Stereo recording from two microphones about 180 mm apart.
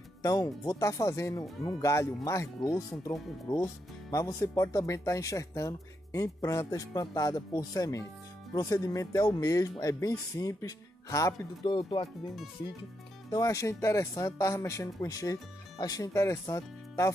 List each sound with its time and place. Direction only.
0.2 s speech: 20° left (ahead or behind)
13.3 s speech: 20° left (ahead or behind)